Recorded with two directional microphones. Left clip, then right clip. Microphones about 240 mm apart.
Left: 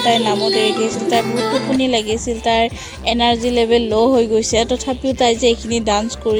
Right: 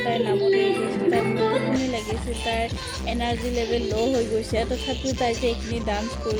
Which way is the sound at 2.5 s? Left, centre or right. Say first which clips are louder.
Left 11 dB; left.